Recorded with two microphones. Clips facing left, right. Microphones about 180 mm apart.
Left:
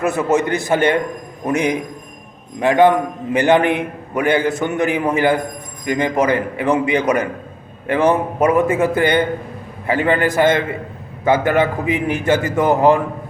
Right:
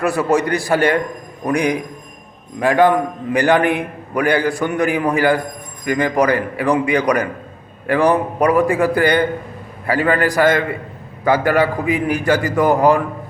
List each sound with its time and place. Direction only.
0.0 s a man's voice: 20° left (ahead or behind)